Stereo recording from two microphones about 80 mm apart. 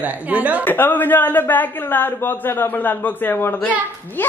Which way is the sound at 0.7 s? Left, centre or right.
Left.